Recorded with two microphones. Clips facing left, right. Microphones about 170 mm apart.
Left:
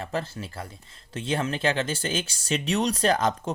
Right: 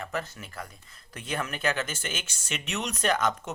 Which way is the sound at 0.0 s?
30° left (ahead or behind).